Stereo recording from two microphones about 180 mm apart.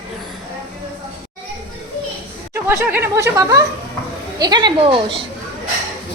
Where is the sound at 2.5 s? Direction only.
15° right (ahead or behind).